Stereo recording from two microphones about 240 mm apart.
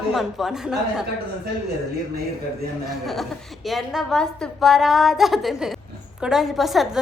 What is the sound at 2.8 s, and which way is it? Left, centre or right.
A woman's voice, centre.